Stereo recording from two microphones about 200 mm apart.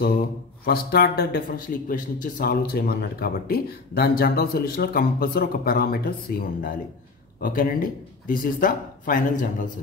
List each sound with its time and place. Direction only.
0.7 s speech: 50° left (ahead or behind)